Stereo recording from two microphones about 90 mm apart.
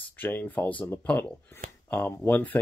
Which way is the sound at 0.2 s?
20° left (ahead or behind).